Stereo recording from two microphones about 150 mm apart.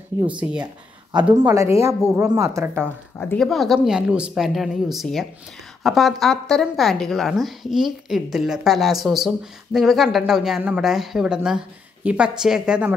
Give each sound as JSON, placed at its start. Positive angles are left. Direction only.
{"t": 0.3, "sound": "speech", "side_deg": -5}
{"t": 1.5, "sound": "a woman's voice", "side_deg": -20}
{"t": 3.3, "sound": "a woman's voice", "side_deg": 0}